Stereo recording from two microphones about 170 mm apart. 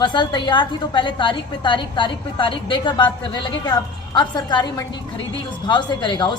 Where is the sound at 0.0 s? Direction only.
25° left (ahead or behind).